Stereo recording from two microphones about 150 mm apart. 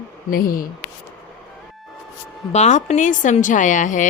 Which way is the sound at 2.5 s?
50° left (ahead or behind).